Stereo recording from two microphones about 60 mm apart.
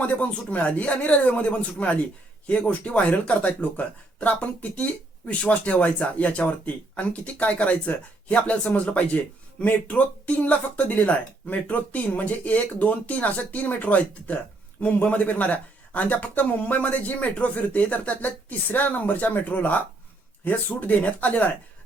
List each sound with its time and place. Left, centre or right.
0.0 s speech: left